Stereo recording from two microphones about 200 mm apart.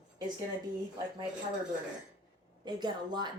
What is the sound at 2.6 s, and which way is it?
Speech, 20° right (ahead or behind).